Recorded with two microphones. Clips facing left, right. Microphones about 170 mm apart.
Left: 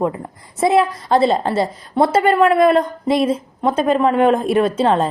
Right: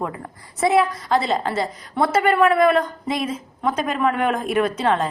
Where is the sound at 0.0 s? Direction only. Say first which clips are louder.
Left 7 dB; 25° left (ahead or behind).